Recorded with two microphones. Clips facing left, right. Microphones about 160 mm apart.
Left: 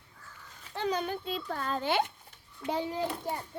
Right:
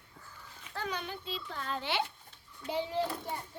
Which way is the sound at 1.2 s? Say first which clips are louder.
Left 5 dB; 50° left (ahead or behind).